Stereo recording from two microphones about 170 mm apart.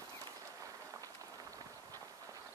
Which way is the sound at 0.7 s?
20° right (ahead or behind).